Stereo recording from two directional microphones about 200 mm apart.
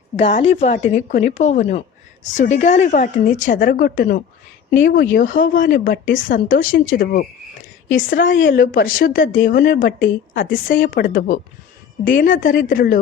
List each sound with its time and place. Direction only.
0.2 s a woman's voice: 30° left (ahead or behind)
8.2 s a woman's voice: 70° left (ahead or behind)
8.4 s a woman's voice: 45° left (ahead or behind)